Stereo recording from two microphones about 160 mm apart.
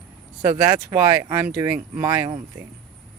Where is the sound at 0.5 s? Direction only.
25° right (ahead or behind).